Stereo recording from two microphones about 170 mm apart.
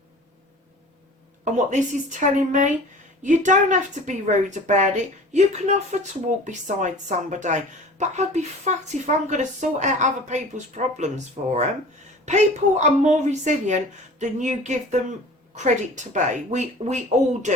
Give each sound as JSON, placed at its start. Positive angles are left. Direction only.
{"t": 1.5, "sound": "speech", "side_deg": -45}